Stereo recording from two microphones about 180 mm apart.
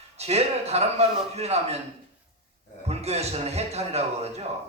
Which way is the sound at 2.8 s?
35° right (ahead or behind).